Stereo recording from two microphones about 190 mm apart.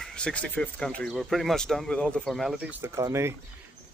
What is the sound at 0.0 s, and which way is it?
Speech, 5° left (ahead or behind).